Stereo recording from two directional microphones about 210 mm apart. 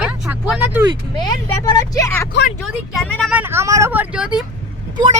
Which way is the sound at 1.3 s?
15° left (ahead or behind).